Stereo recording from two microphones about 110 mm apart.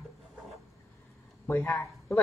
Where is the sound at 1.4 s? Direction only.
20° left (ahead or behind).